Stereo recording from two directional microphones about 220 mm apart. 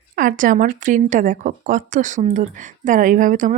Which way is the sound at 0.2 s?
40° right (ahead or behind).